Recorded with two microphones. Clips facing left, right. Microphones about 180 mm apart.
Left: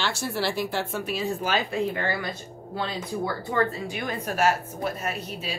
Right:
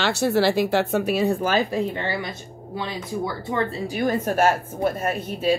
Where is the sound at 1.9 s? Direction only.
25° right (ahead or behind).